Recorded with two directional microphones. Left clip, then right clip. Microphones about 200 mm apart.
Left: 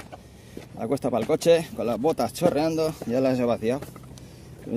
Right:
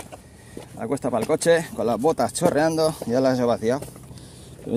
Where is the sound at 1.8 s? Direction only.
10° right (ahead or behind).